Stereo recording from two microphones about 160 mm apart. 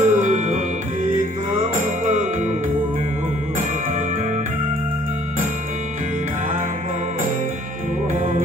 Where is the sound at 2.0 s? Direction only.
50° right (ahead or behind).